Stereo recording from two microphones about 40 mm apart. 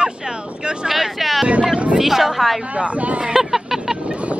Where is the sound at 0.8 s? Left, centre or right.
Centre.